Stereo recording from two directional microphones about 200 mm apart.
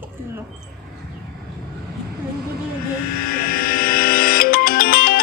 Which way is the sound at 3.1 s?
45° left (ahead or behind).